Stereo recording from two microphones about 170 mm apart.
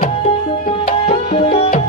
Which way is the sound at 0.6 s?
45° left (ahead or behind).